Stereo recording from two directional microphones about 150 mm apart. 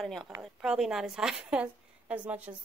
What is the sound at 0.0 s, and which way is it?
Speech, centre (ahead or behind).